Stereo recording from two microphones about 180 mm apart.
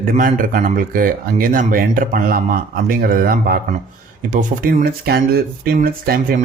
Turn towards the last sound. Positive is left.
turn(degrees=-55)  # may be behind; listen again after turning